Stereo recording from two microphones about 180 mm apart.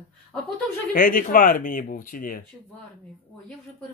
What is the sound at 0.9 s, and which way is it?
A man's voice, 50° left (ahead or behind).